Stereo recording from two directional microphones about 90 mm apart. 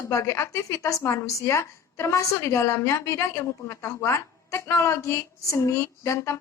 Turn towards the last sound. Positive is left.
turn(degrees=30)  # may be behind; listen again after turning